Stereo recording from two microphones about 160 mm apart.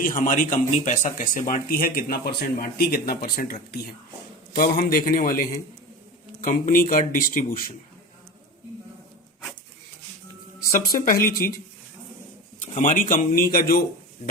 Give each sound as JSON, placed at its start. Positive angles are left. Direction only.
{"t": 0.0, "sound": "speech", "side_deg": 55}
{"t": 4.5, "sound": "speech", "side_deg": 60}
{"t": 10.7, "sound": "speech", "side_deg": 60}
{"t": 12.6, "sound": "speech", "side_deg": 50}